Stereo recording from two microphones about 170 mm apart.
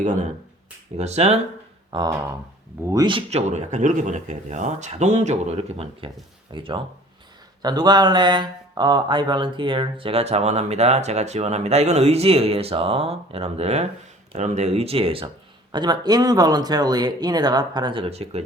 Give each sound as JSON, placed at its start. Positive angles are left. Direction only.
{"t": 0.9, "sound": "speech", "side_deg": -40}